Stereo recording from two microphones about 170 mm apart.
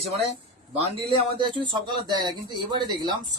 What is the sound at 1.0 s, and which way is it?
Speech, 30° right (ahead or behind).